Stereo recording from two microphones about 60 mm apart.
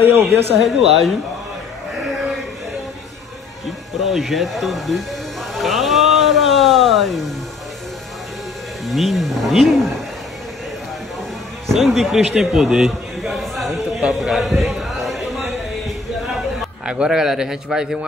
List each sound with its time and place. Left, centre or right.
0.0 s a man's voice: right
0.6 s speech: centre
4.1 s speech: centre
5.5 s a sound: centre
8.8 s speech: centre
11.6 s a sound: centre
16.8 s a man's voice: centre